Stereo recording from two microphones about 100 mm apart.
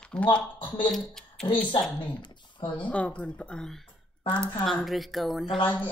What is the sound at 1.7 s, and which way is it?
Speech, 55° left (ahead or behind).